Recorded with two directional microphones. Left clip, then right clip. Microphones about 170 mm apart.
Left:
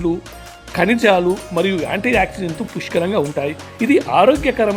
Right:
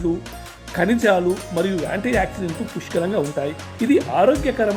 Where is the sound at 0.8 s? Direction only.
25° left (ahead or behind).